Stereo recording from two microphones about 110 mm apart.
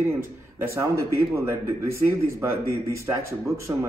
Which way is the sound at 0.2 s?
20° right (ahead or behind).